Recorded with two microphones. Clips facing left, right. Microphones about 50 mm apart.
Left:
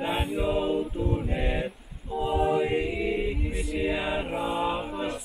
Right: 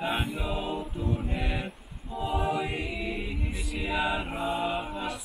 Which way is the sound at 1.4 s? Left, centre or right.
Left.